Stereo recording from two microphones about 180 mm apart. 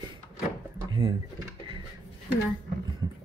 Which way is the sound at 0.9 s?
25° right (ahead or behind).